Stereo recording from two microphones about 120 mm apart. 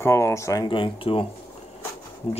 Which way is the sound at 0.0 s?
20° left (ahead or behind).